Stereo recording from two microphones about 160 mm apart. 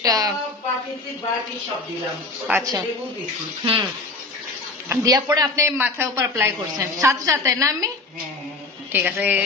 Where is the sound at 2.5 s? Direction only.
20° right (ahead or behind).